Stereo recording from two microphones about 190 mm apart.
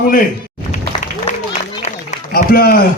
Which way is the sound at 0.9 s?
35° left (ahead or behind).